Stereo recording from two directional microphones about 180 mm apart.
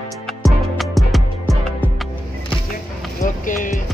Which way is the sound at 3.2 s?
45° left (ahead or behind).